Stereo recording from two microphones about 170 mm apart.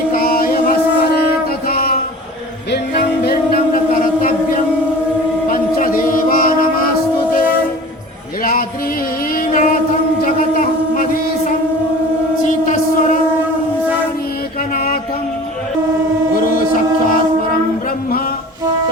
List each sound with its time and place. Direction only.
0.1 s mantra: 55° left (ahead or behind)
1.6 s a sound: 60° left (ahead or behind)
2.7 s music: 70° left (ahead or behind); by 4.6 s 50° left (ahead or behind)
5.5 s a sound: 55° left (ahead or behind)
9.3 s music: 55° left (ahead or behind)
12.5 s music: 45° left (ahead or behind)
14.7 s music: 60° left (ahead or behind)
16.6 s music: 50° left (ahead or behind)